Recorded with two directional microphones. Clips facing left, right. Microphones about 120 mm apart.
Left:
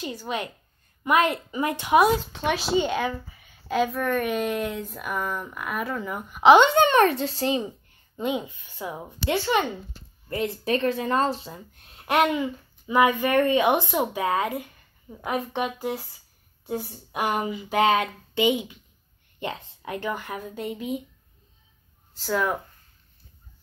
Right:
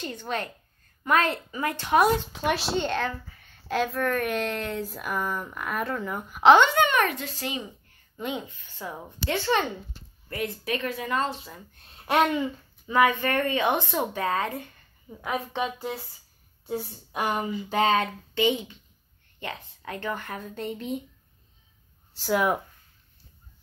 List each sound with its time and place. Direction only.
0.0 s speech: 10° left (ahead or behind)
2.0 s speech: centre (ahead or behind)
6.5 s speech: 25° left (ahead or behind)
8.2 s speech: 15° left (ahead or behind)
10.3 s speech: 25° left (ahead or behind)
12.1 s speech: 10° left (ahead or behind)
22.2 s speech: 10° right (ahead or behind)